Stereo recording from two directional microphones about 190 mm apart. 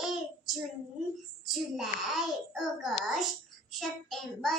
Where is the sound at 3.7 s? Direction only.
Centre (ahead or behind).